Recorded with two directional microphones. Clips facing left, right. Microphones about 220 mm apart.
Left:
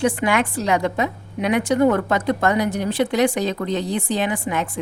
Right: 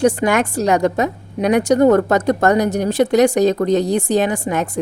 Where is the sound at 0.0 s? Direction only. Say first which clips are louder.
Right 4 dB; 40° right (ahead or behind).